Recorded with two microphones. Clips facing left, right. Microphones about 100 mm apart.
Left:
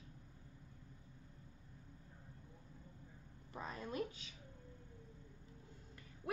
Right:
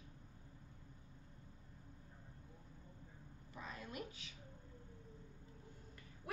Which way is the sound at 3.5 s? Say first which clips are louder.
Left 5 dB; 40° left (ahead or behind).